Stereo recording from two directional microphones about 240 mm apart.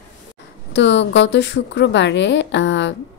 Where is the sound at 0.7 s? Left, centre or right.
Left.